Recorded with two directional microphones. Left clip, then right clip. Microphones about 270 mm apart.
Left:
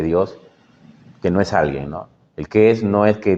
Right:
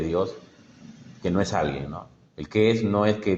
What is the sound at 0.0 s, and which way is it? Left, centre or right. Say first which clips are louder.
Speech: left 7 dB; left.